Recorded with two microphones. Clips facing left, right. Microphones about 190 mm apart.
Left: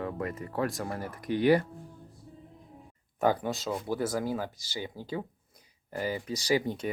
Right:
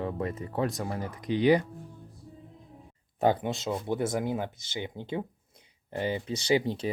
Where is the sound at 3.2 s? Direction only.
25° right (ahead or behind).